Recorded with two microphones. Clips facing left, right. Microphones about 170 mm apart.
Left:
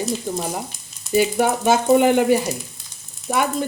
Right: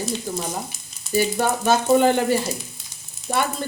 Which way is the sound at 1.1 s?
20° left (ahead or behind).